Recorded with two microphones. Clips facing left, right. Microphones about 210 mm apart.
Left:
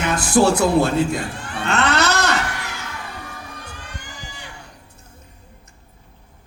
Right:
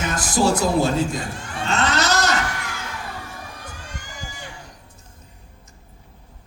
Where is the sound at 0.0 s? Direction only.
65° left (ahead or behind).